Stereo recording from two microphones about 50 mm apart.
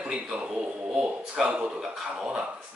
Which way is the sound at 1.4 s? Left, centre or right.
Centre.